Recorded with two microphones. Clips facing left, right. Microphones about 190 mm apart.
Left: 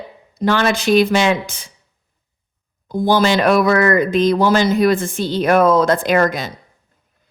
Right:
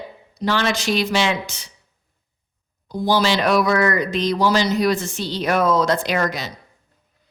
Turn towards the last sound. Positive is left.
turn(degrees=50)  # may be behind; listen again after turning